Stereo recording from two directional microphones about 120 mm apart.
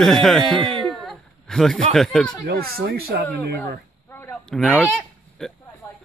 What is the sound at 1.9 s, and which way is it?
Speech, 5° left (ahead or behind).